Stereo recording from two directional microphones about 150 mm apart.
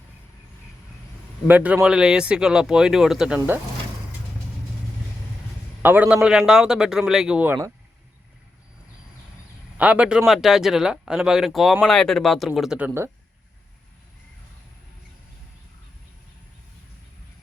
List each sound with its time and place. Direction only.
1.5 s speech: 10° right (ahead or behind)
5.8 s speech: 10° right (ahead or behind)
9.7 s speech: 10° right (ahead or behind)